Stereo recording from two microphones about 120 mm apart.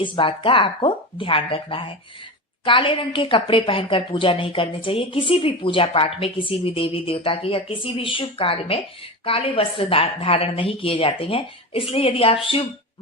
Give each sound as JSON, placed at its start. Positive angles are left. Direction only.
{"t": 0.0, "sound": "a woman's voice", "side_deg": 45}